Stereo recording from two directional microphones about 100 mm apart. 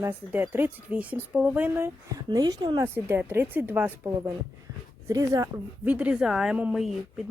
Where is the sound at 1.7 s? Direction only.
30° right (ahead or behind).